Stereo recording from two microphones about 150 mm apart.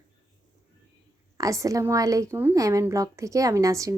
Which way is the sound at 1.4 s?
20° right (ahead or behind).